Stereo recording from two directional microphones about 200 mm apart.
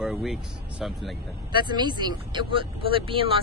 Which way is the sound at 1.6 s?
20° right (ahead or behind).